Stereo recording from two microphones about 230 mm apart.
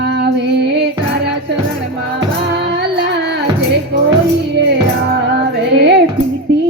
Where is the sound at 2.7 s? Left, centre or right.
Right.